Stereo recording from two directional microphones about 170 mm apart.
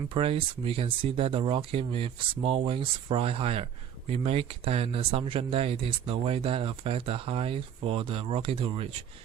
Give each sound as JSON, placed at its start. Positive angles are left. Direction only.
{"t": 0.1, "sound": "speech", "side_deg": -30}